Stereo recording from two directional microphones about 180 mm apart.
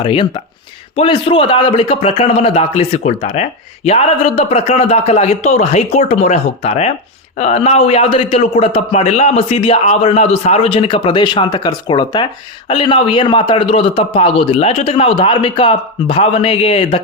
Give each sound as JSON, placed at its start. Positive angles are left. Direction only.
{"t": 0.0, "sound": "a man's voice", "side_deg": 30}